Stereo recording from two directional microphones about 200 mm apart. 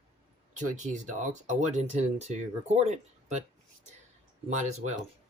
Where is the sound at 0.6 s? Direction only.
35° right (ahead or behind).